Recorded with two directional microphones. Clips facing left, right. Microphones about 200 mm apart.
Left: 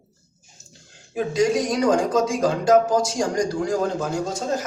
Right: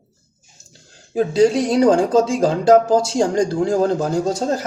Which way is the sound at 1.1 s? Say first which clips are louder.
Right 5 dB; 30° right (ahead or behind).